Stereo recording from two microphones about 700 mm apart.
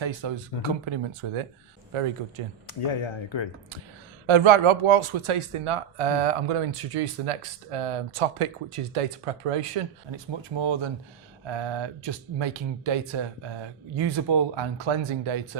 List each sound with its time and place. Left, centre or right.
0.0 s speech: right
2.8 s speech: left
4.3 s speech: right
10.6 s speech: right